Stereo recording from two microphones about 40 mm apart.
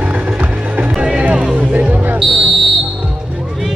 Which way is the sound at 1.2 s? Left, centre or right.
Right.